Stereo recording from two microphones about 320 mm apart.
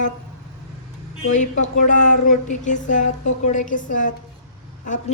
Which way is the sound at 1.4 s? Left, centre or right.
Left.